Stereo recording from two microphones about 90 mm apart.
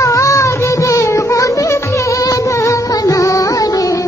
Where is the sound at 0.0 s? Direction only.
35° left (ahead or behind).